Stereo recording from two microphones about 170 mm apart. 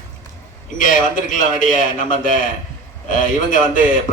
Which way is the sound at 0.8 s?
50° left (ahead or behind).